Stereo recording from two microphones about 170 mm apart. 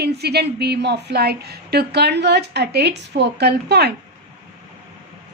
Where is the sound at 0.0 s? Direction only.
70° right (ahead or behind).